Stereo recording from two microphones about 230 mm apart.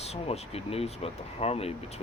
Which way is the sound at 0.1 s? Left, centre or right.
Left.